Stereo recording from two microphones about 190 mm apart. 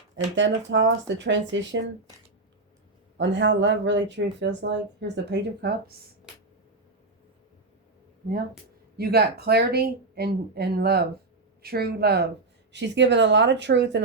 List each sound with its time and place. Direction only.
0.3 s speech: 75° right (ahead or behind)
3.2 s speech: 70° right (ahead or behind)
9.0 s a woman's voice: 55° right (ahead or behind)